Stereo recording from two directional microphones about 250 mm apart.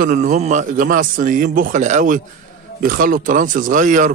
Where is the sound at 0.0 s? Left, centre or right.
Right.